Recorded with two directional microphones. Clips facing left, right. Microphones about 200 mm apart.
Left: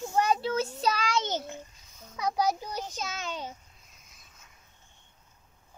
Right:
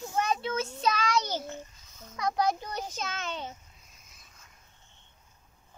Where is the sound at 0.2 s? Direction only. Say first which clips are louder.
Left 3 dB; 35° left (ahead or behind).